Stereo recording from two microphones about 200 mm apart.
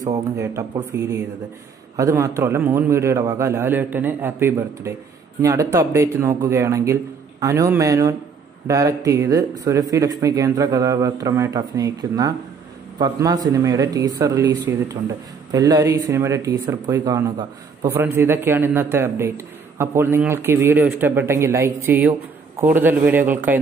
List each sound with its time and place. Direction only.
0.4 s speech: 15° right (ahead or behind)